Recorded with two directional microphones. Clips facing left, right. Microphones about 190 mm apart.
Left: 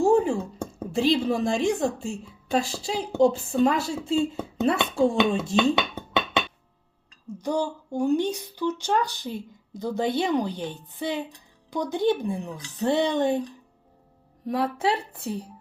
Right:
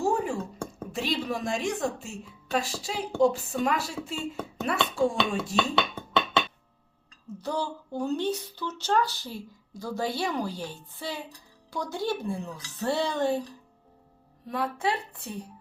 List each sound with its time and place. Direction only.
0.0 s a sound: 25° left (ahead or behind)
0.8 s a woman's voice: 30° left (ahead or behind)
7.4 s a woman's voice: 15° left (ahead or behind)
14.4 s a woman's voice: 25° left (ahead or behind)